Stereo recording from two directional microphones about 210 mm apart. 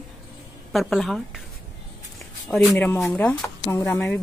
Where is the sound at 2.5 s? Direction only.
Centre (ahead or behind).